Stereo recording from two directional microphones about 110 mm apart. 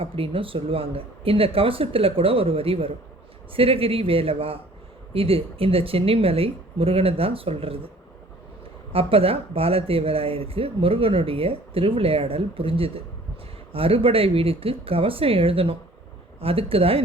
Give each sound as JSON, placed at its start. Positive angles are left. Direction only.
{"t": 0.0, "sound": "speech", "side_deg": -55}
{"t": 8.9, "sound": "speech", "side_deg": -60}